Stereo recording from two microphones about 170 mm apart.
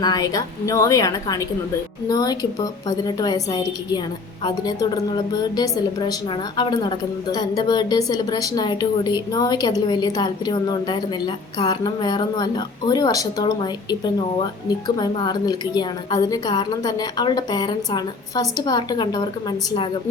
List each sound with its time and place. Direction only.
0.0 s a woman's voice: 20° left (ahead or behind)